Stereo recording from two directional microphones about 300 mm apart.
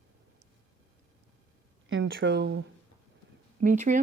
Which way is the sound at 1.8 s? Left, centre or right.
Right.